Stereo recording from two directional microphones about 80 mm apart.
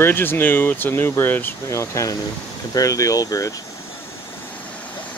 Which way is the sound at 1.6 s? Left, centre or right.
Left.